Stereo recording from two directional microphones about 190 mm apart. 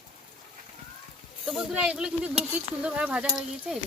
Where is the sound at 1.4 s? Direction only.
5° right (ahead or behind).